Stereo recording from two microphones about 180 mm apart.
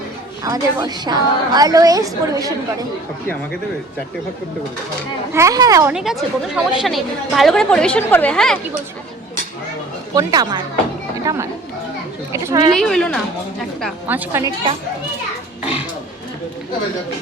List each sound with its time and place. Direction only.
0.4 s a woman's voice: 20° right (ahead or behind)
5.3 s speech: 15° right (ahead or behind)
5.9 s speech: 5° right (ahead or behind)
10.2 s a woman's voice: 20° right (ahead or behind)
12.3 s a woman's voice: 20° right (ahead or behind)
12.7 s speech: 5° left (ahead or behind)
14.1 s speech: 15° right (ahead or behind)